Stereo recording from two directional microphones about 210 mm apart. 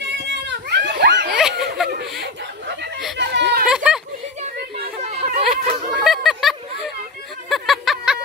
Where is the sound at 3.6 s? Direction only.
5° right (ahead or behind).